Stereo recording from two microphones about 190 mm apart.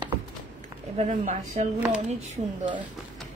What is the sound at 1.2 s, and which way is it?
Speech, 40° right (ahead or behind).